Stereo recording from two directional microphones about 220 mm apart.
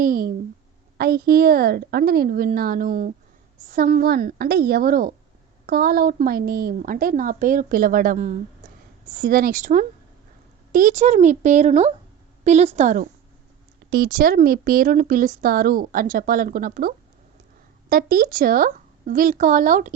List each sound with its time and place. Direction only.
0.0 s a woman's voice: 40° right (ahead or behind)